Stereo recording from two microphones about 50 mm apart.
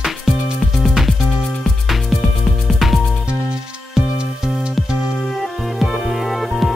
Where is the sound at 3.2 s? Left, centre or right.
Centre.